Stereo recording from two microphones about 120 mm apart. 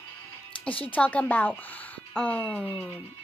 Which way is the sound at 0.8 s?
15° left (ahead or behind).